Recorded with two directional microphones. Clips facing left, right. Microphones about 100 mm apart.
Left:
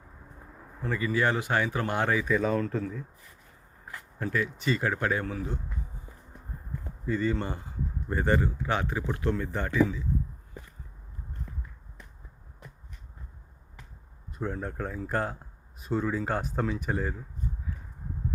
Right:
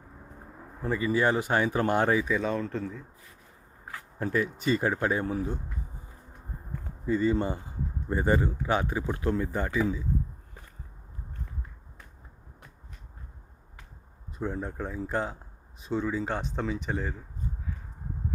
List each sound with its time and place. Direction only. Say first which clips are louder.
0.8 s speech: right 2 dB; 20° right (ahead or behind)
2.2 s speech: left 2 dB; centre (ahead or behind)
4.2 s speech: right 2 dB; 25° right (ahead or behind)
7.0 s speech: right 3 dB; 20° right (ahead or behind)
14.3 s speech: even; centre (ahead or behind)